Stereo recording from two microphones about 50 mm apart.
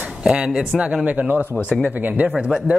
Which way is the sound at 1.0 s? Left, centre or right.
Right.